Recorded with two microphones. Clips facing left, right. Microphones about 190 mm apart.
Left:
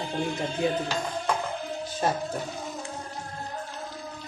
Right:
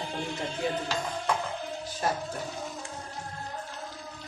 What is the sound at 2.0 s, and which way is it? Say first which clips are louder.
Speech: left 3 dB; 25° left (ahead or behind).